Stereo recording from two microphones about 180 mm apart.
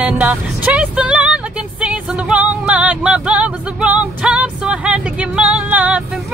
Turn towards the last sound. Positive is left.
turn(degrees=-5)  # may be behind; listen again after turning